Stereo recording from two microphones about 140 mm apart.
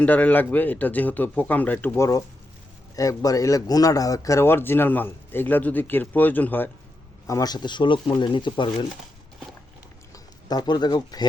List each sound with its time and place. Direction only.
0.0 s speech: 10° left (ahead or behind)
7.3 s speech: 25° left (ahead or behind)
10.5 s speech: 30° left (ahead or behind)